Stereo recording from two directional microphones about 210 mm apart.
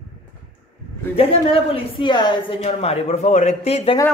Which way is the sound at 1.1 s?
25° left (ahead or behind).